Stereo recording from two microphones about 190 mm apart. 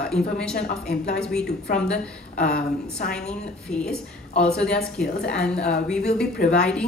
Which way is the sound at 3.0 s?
50° left (ahead or behind).